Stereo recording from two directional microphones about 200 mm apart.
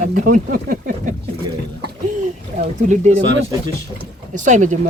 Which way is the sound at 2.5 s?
35° right (ahead or behind).